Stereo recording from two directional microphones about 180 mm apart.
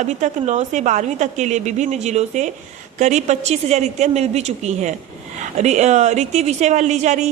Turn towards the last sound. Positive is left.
turn(degrees=-40)  # may be behind; listen again after turning